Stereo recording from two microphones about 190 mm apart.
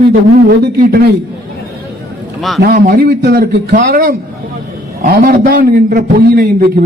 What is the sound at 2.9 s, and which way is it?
A man's voice, 60° right (ahead or behind).